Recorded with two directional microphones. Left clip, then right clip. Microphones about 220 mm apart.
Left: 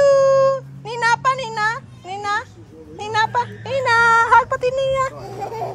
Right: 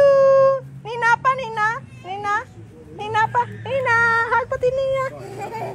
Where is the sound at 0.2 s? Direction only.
15° left (ahead or behind).